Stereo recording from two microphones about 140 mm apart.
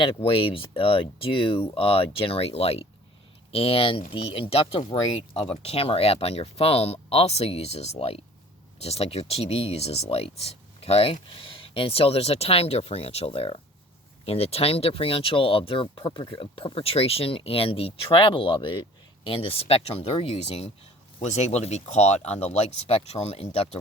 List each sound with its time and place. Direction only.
0.0 s speech: 40° left (ahead or behind)